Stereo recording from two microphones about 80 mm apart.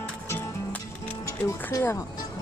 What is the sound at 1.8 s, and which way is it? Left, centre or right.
Speech, left.